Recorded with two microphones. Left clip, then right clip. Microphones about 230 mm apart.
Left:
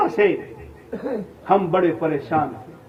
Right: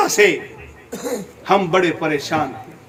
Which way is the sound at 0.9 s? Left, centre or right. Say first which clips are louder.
Right 1 dB; right.